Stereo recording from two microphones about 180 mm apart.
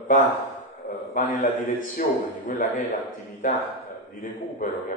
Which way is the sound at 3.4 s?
45° left (ahead or behind).